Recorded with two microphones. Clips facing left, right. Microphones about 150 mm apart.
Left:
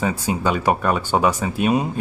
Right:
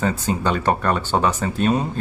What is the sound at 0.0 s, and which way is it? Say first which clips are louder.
Speech: even; 10° left (ahead or behind).